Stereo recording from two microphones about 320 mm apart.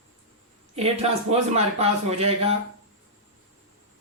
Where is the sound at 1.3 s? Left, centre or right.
Centre.